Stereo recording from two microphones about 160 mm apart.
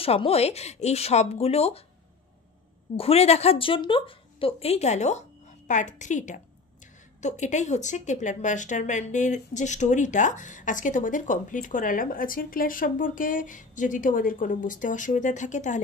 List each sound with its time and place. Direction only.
0.0 s speech: 40° left (ahead or behind)
3.0 s speech: 40° left (ahead or behind)